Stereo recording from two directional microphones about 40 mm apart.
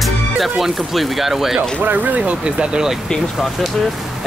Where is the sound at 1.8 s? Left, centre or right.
Right.